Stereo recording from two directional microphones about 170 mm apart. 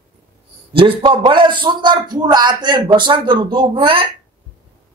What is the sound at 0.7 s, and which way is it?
A man's voice, 30° right (ahead or behind).